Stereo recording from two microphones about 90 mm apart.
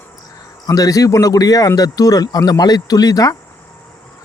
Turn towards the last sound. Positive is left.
turn(degrees=45)  # may be behind; listen again after turning